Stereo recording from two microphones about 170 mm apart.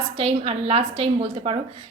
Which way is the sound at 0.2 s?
35° right (ahead or behind).